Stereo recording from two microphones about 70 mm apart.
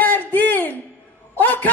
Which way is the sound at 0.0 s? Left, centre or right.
Left.